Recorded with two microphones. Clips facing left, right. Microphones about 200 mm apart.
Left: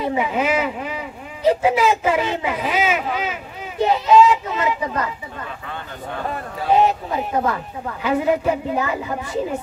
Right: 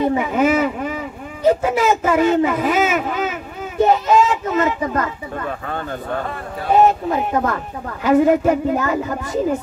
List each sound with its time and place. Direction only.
0.2 s a child's voice: 45° right (ahead or behind)